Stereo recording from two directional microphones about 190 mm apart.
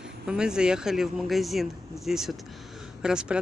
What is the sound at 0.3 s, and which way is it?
Speech, 5° right (ahead or behind).